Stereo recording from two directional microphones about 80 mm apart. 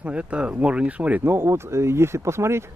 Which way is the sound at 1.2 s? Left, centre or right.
Right.